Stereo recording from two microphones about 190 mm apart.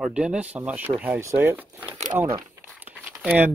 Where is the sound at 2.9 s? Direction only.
10° right (ahead or behind).